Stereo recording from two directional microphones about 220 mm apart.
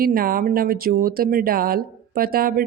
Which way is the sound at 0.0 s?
40° right (ahead or behind).